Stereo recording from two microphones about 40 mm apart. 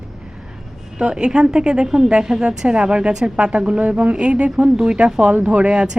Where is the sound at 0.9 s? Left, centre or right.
Right.